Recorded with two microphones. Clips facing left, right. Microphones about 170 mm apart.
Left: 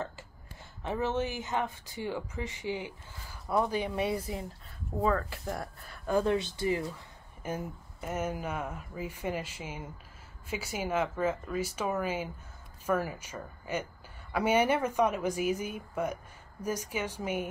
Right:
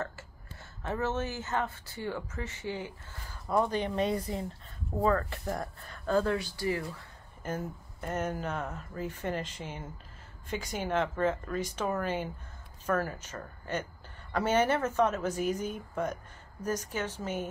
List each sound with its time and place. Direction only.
0.8 s speech: 15° left (ahead or behind)
6.0 s speech: 15° left (ahead or behind)
7.4 s speech: 10° left (ahead or behind)